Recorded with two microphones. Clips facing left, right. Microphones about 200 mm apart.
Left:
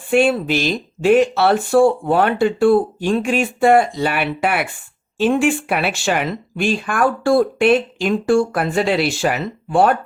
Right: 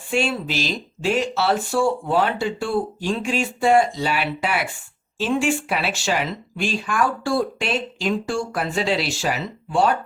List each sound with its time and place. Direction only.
0.1 s speech: 55° left (ahead or behind)